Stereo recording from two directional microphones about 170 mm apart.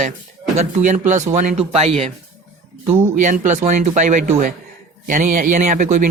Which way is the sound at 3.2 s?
45° right (ahead or behind).